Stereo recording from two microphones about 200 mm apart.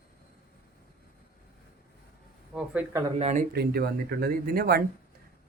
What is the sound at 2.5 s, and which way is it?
Speech, 10° right (ahead or behind).